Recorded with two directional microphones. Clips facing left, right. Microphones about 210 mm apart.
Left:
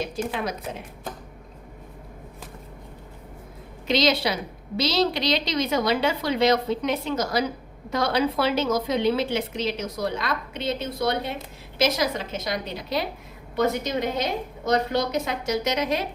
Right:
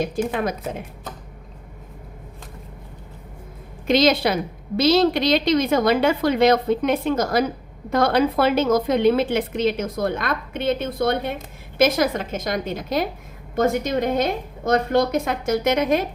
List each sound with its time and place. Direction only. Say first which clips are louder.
0.3 s a woman's voice: right 5 dB; 50° right (ahead or behind)
3.8 s a woman's voice: right 5 dB; 50° right (ahead or behind)